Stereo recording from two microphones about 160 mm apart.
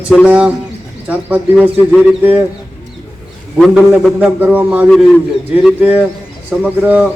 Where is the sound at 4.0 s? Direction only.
10° right (ahead or behind).